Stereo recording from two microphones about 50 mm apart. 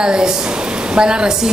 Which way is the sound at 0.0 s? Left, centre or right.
Centre.